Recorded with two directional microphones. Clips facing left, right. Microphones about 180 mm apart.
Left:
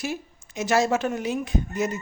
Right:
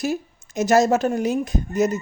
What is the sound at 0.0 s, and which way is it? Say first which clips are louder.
Speech: right 6 dB; 40° right (ahead or behind).